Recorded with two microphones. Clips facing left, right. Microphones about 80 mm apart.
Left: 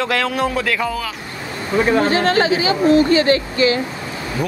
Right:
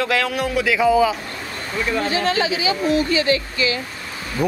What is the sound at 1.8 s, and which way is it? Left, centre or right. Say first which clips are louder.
Speech: left 5 dB; left.